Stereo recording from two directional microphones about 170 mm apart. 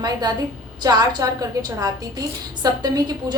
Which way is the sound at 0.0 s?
25° right (ahead or behind).